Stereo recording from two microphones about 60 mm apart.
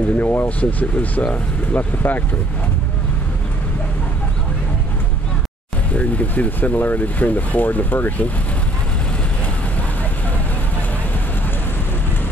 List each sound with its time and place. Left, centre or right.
0.2 s speech: left
0.5 s speech: left
5.9 s speech: left